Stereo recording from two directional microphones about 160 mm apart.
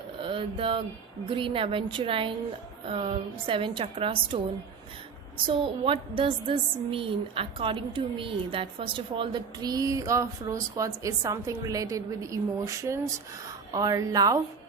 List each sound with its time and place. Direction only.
0.2 s a sound: 35° right (ahead or behind)
1.2 s a woman's voice: 30° right (ahead or behind)
5.5 s a woman's voice: 35° right (ahead or behind)